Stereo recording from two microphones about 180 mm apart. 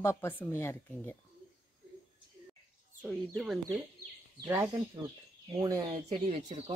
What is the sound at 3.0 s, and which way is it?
Speech, centre (ahead or behind).